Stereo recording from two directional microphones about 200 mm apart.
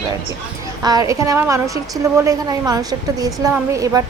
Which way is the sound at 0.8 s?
20° right (ahead or behind).